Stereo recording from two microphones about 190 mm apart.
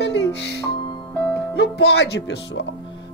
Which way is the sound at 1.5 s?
60° left (ahead or behind).